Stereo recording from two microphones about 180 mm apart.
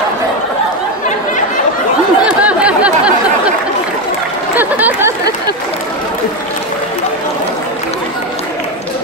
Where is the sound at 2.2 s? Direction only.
5° right (ahead or behind).